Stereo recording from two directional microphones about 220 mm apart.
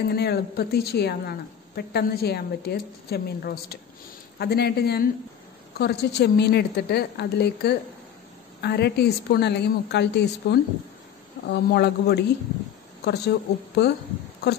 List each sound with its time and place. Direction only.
0.1 s a woman's voice: 45° left (ahead or behind)